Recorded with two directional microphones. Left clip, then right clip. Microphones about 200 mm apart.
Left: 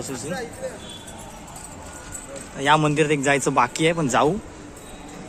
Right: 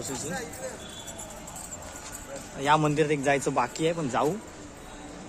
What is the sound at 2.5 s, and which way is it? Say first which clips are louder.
Speech: left 5 dB; centre (ahead or behind).